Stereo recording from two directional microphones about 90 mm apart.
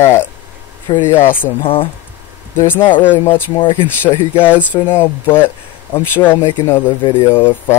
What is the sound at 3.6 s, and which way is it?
Speech, 70° left (ahead or behind).